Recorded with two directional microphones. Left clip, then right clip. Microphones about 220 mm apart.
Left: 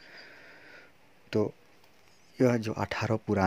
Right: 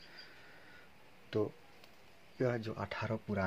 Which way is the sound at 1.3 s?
40° left (ahead or behind).